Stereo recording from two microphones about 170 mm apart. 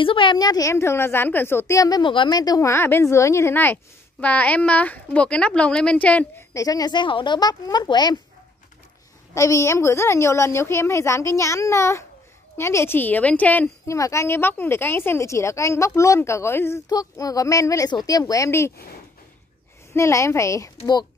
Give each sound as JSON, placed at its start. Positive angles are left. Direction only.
{"t": 0.0, "sound": "a woman's voice", "side_deg": 30}
{"t": 9.3, "sound": "a woman's voice", "side_deg": 15}
{"t": 19.9, "sound": "a woman's voice", "side_deg": 15}